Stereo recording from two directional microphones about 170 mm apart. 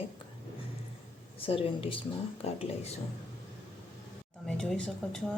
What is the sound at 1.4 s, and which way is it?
Speech, 35° left (ahead or behind).